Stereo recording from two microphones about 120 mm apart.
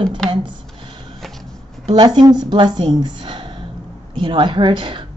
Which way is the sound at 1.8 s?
40° right (ahead or behind).